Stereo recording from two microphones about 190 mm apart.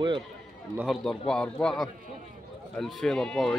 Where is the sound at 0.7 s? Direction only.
Centre (ahead or behind).